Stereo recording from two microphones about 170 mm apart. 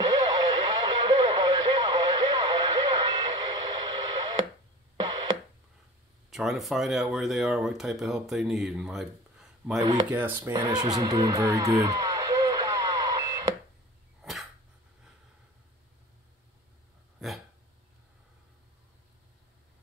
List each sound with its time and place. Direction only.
0.0 s radio: 25° right (ahead or behind)
6.3 s speech: centre (ahead or behind)
9.8 s speech: 20° right (ahead or behind)
10.1 s speech: 10° right (ahead or behind)
10.5 s a sound: 25° right (ahead or behind)
17.2 s a sound: centre (ahead or behind)